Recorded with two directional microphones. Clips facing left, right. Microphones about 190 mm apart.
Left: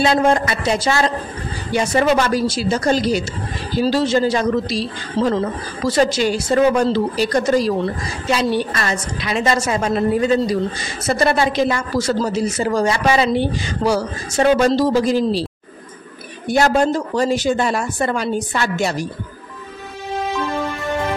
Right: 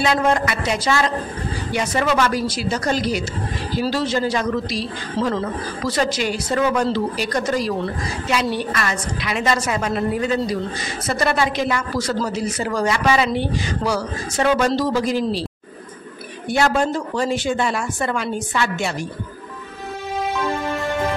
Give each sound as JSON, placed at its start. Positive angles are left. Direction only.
{"t": 0.0, "sound": "speech", "side_deg": 30}
{"t": 16.4, "sound": "speech", "side_deg": 40}